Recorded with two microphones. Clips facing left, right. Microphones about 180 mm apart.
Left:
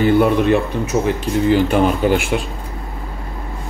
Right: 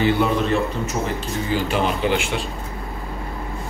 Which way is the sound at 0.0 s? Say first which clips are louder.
Left 5 dB; 55° left (ahead or behind).